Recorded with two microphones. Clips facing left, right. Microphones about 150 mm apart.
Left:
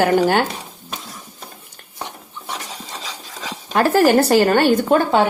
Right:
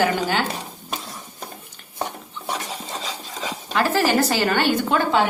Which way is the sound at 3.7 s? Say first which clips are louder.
Left 6 dB; 50° left (ahead or behind).